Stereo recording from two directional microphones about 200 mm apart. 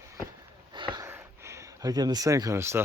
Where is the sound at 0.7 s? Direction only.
20° right (ahead or behind).